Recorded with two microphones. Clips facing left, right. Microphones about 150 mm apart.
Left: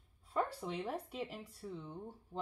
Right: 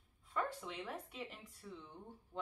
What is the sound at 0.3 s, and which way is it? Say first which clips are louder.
Speech: left 4 dB; 35° left (ahead or behind).